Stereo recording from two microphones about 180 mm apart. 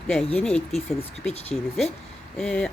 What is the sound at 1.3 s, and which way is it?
Speech, 35° left (ahead or behind).